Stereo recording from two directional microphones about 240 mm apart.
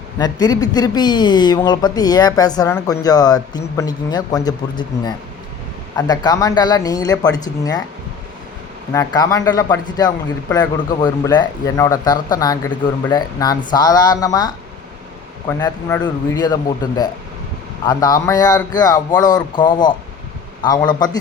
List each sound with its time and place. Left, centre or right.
0.2 s speech: centre
8.9 s speech: centre